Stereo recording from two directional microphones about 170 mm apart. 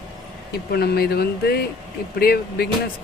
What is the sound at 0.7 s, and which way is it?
Speech, 65° left (ahead or behind).